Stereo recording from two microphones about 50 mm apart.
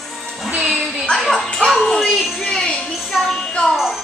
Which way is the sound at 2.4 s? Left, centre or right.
Centre.